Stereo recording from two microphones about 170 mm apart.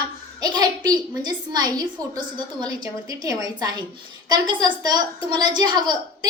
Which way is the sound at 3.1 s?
20° right (ahead or behind).